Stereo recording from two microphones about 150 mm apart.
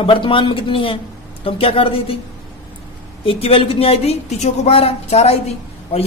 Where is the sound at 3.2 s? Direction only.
40° left (ahead or behind).